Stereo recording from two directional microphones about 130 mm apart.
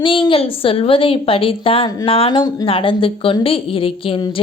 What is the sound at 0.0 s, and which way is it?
A woman's voice, 40° left (ahead or behind).